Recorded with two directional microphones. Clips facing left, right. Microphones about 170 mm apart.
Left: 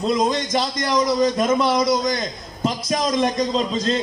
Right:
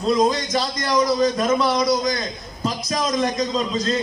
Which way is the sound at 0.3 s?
20° left (ahead or behind).